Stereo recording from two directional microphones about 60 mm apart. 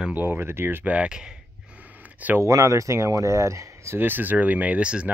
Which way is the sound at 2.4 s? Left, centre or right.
Right.